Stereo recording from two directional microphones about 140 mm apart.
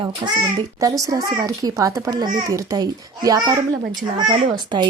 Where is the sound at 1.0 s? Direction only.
25° right (ahead or behind).